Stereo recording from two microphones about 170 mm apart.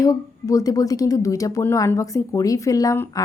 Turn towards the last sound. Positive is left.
turn(degrees=15)  # may be behind; listen again after turning